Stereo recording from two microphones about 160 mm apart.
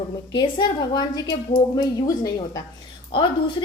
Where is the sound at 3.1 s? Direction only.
30° left (ahead or behind).